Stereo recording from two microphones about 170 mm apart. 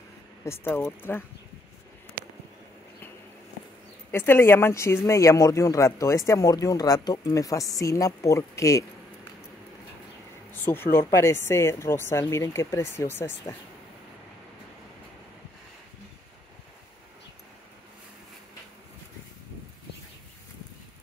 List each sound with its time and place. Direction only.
0.5 s speech: 15° left (ahead or behind)
4.1 s speech: 15° left (ahead or behind)
10.5 s a sound: 10° left (ahead or behind)
11.0 s speech: 15° left (ahead or behind)